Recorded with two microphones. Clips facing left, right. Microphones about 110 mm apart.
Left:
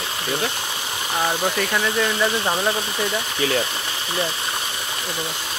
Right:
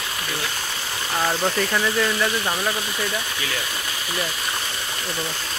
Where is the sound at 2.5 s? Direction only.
20° left (ahead or behind).